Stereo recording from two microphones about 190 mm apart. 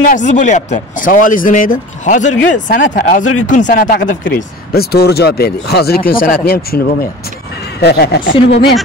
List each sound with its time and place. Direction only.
0.0 s speech: 40° left (ahead or behind)
7.8 s speech: 60° left (ahead or behind)